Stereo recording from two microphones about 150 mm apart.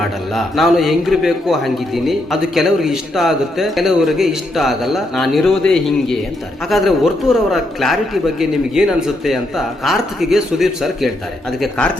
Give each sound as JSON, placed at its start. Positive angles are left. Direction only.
{"t": 0.0, "sound": "a man's voice", "side_deg": 0}